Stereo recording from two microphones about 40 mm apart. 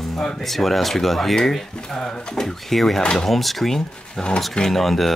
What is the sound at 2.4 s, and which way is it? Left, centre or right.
Speech, centre.